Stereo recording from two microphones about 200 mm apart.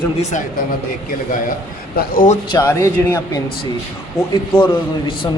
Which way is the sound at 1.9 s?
50° left (ahead or behind).